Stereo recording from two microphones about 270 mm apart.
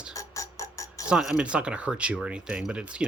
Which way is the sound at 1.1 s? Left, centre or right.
Centre.